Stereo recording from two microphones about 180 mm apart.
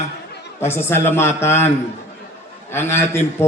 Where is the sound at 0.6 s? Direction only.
15° left (ahead or behind).